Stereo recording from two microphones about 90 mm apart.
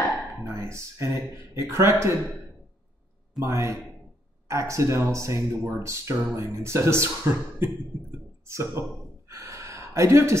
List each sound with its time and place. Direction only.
0.6 s speech: 35° right (ahead or behind)
3.3 s speech: 35° right (ahead or behind)
9.3 s gasp: 35° right (ahead or behind)